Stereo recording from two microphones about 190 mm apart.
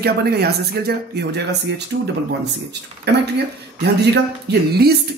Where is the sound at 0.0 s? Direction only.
55° right (ahead or behind).